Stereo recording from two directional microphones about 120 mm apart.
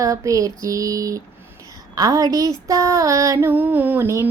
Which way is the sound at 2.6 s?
25° right (ahead or behind).